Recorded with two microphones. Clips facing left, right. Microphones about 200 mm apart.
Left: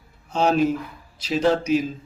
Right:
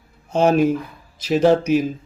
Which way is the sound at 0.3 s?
55° right (ahead or behind).